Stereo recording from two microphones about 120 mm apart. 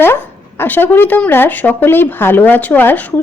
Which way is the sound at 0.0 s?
20° left (ahead or behind).